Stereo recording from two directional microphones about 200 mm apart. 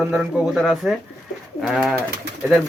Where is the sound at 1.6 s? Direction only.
Centre (ahead or behind).